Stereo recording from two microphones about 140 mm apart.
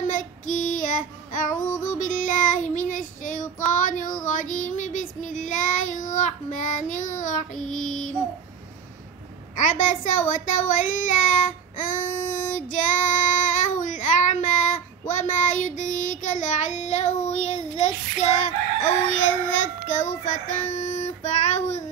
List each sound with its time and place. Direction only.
0.0 s child singing: 70° left (ahead or behind)
9.6 s child singing: 65° left (ahead or behind)